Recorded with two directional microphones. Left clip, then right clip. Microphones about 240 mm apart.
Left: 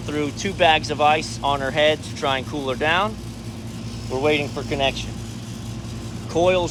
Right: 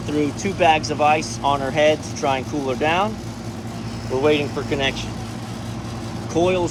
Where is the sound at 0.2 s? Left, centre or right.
Left.